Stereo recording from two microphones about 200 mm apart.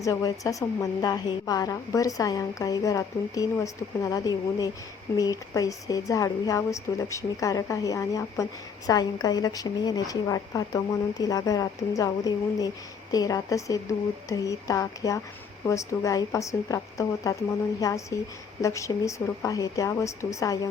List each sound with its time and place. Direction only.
0.0 s a woman's voice: 15° left (ahead or behind)